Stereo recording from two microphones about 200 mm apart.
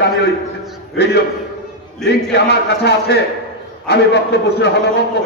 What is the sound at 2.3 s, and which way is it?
A man's voice, 55° left (ahead or behind).